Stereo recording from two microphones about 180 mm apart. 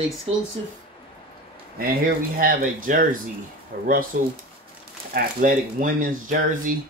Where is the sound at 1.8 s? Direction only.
50° right (ahead or behind).